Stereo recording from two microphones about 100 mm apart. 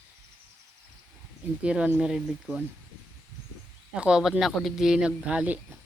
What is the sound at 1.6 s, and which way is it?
Speech, 10° right (ahead or behind).